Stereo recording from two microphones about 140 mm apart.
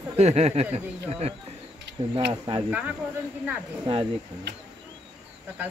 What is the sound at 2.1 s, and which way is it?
Speech, 35° right (ahead or behind).